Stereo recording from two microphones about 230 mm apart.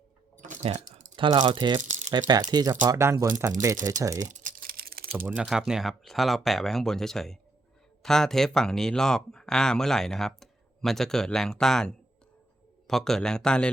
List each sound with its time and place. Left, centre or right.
0.3 s a sound: right
1.8 s rattle: right
2.0 s speech: centre
4.3 s typing: right
5.2 s speech: centre